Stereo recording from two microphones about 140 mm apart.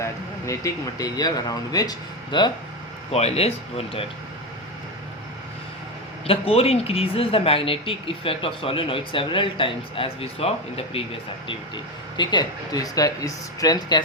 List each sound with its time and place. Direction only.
0.0 s speech: 20° left (ahead or behind)
3.1 s speech: 45° left (ahead or behind)
6.2 s speech: 45° left (ahead or behind)
12.1 s speech: 30° left (ahead or behind)